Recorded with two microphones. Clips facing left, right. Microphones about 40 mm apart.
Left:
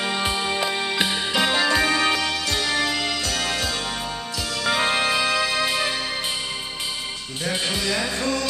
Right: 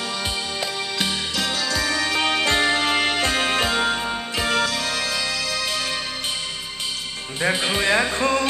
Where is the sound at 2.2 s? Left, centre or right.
Right.